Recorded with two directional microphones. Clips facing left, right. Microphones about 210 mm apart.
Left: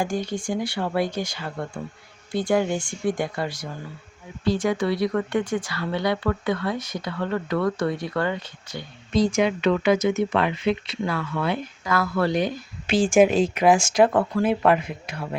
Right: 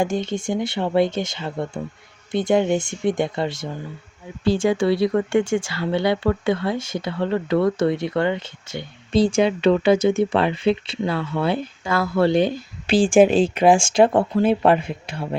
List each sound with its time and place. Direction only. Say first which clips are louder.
0.0 s speech: right 4 dB; 25° right (ahead or behind)